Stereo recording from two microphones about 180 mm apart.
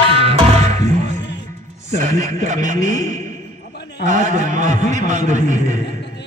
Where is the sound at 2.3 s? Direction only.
40° right (ahead or behind).